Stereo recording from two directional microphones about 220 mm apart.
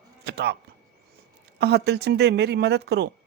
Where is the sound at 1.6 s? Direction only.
50° right (ahead or behind).